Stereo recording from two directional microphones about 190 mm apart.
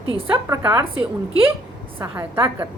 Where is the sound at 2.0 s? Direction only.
15° right (ahead or behind).